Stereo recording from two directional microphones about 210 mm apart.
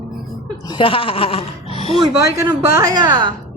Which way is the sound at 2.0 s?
15° right (ahead or behind).